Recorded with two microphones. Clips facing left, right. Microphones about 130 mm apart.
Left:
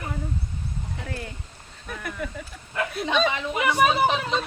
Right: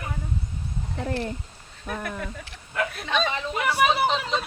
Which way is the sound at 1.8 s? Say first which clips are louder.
Right 1 dB; centre (ahead or behind).